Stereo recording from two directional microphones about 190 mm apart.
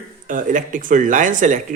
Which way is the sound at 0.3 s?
45° right (ahead or behind).